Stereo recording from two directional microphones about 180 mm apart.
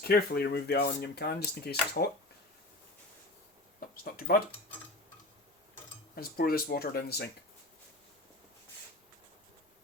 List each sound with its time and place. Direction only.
0.0 s speech: 60° left (ahead or behind)
3.8 s speech: 55° left (ahead or behind)
6.1 s speech: 55° left (ahead or behind)